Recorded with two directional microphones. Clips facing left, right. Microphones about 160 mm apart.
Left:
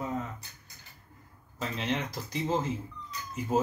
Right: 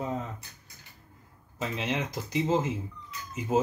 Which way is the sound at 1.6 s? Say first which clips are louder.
Right 1 dB; 20° right (ahead or behind).